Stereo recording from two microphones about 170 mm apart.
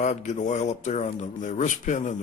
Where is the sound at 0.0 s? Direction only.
45° left (ahead or behind).